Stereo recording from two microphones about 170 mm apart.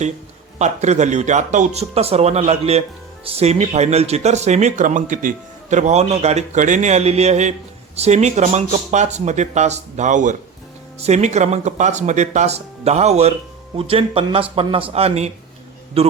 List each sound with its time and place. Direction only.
0.6 s speech: 40° right (ahead or behind)